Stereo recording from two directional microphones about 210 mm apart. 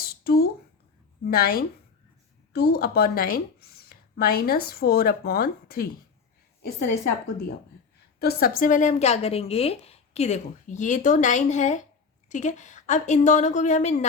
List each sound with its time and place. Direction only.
0.0 s a sound: 45° left (ahead or behind)
1.3 s a woman's voice: 45° left (ahead or behind)
8.2 s a woman's voice: 45° left (ahead or behind)